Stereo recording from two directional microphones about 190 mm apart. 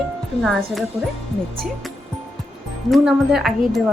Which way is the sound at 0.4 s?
Centre (ahead or behind).